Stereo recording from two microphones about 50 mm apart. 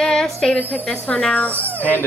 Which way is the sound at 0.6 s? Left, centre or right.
Left.